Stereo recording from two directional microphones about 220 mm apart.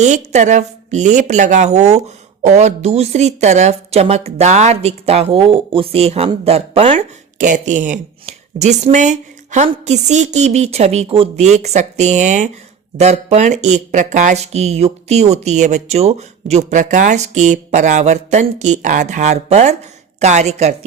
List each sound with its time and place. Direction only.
0.0 s speech: 35° right (ahead or behind)